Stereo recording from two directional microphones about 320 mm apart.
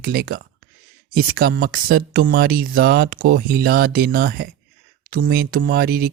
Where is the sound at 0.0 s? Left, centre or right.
Right.